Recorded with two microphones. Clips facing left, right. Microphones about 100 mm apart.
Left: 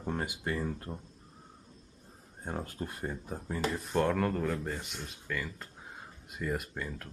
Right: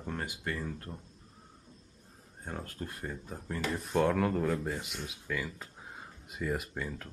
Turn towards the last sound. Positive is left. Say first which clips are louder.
# even
turn(degrees=0)  # may be behind; listen again after turning